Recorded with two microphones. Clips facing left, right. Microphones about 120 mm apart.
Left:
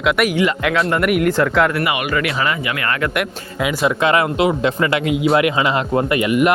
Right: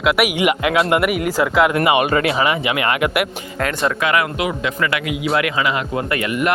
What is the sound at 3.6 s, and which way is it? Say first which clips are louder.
Speech: left 2 dB; 5° left (ahead or behind).